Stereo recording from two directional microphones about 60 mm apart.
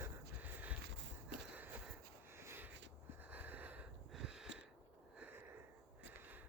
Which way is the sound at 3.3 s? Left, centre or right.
Right.